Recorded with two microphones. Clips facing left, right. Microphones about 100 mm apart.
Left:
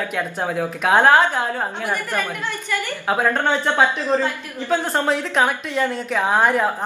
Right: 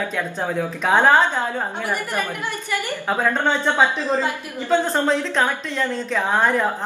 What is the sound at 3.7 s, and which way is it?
Speech, 15° right (ahead or behind).